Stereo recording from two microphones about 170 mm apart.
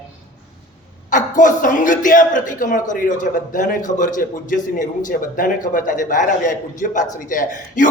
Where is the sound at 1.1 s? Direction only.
50° left (ahead or behind).